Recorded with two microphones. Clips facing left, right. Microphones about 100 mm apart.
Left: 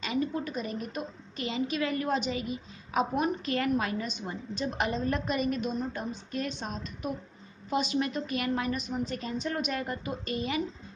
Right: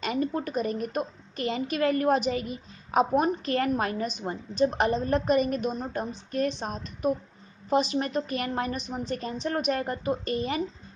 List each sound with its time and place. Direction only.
0.0 s a woman's voice: 45° right (ahead or behind)